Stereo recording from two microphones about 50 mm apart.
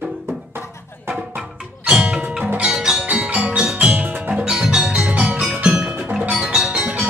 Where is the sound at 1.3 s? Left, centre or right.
Centre.